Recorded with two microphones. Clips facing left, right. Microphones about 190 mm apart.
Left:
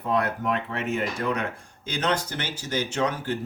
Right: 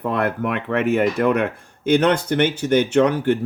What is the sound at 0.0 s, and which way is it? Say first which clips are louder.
Speech: right 4 dB; 60° right (ahead or behind).